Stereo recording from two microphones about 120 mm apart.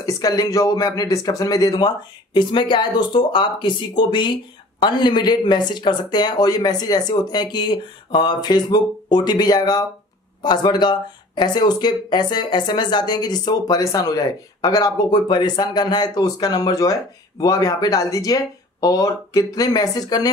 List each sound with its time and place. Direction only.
0.0 s speech: 30° left (ahead or behind)